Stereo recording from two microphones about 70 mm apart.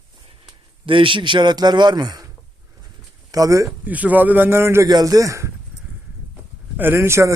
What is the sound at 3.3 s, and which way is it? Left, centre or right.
Speech, right.